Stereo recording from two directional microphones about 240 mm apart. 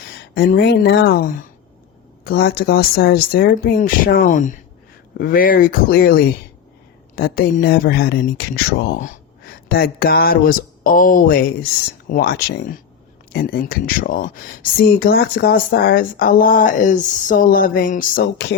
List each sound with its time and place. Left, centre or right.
0.3 s speech: left